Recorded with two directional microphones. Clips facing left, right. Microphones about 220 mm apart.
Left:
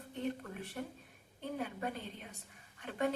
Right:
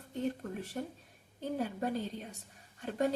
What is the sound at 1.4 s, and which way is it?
Speech, 35° right (ahead or behind).